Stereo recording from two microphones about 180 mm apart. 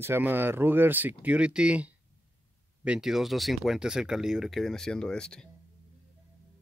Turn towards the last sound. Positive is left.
turn(degrees=5)  # may be behind; listen again after turning